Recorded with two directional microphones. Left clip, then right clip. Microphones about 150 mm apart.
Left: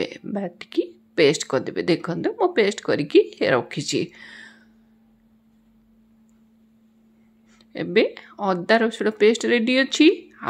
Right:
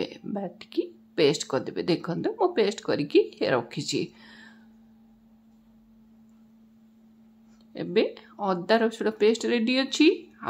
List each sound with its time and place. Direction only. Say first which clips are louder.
0.0 s speech: left 5 dB; 15° left (ahead or behind)
7.7 s speech: left 5 dB; 20° left (ahead or behind)